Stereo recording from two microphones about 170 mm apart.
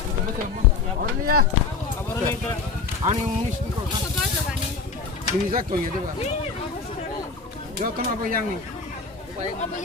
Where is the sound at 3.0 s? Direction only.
45° right (ahead or behind).